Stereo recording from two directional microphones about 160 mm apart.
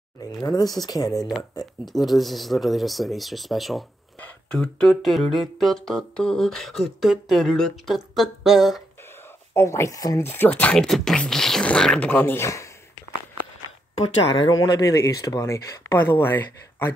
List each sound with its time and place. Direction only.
0.4 s speech: 25° left (ahead or behind)
1.9 s a sound: centre (ahead or behind)
9.5 s speech: 15° left (ahead or behind)
14.3 s speech: 30° left (ahead or behind); by 16.9 s 15° left (ahead or behind)